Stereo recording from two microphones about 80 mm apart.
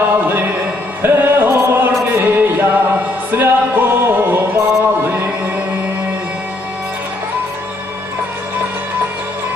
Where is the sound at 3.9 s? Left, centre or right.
Right.